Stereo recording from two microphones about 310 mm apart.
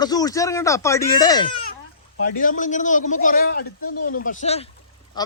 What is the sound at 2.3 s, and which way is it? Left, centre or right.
A man's voice, left.